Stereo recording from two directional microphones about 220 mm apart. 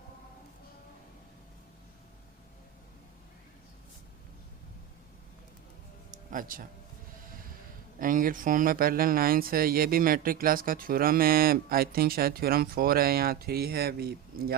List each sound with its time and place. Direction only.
6.3 s speech: 40° right (ahead or behind)
7.9 s speech: 40° right (ahead or behind)